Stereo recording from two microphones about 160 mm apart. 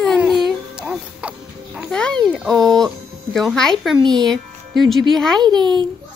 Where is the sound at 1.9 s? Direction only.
5° left (ahead or behind).